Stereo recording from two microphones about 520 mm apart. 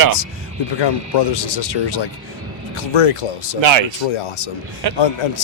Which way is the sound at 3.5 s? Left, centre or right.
Right.